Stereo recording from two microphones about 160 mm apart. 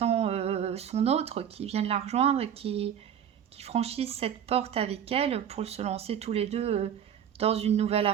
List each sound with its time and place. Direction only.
0.0 s speech: 40° right (ahead or behind)